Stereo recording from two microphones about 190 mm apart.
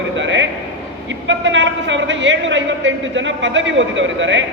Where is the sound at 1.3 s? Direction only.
75° right (ahead or behind).